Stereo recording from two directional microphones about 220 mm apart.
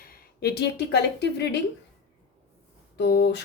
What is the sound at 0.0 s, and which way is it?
Speech, 45° left (ahead or behind).